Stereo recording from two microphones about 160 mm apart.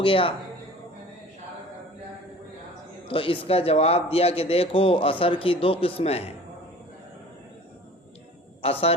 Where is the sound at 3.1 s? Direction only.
35° left (ahead or behind).